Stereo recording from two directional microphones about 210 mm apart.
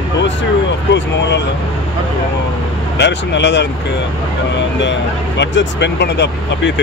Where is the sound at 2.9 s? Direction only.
55° left (ahead or behind).